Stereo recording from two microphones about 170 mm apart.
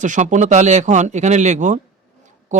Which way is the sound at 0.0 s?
45° right (ahead or behind).